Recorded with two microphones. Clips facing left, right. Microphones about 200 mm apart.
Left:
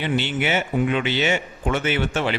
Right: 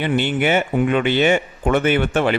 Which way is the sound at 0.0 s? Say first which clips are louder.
Right 4 dB; 50° right (ahead or behind).